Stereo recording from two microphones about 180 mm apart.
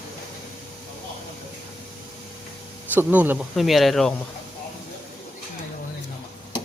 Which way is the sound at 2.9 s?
10° right (ahead or behind).